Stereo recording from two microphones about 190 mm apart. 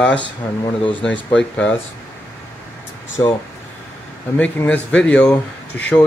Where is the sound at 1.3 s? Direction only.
5° left (ahead or behind).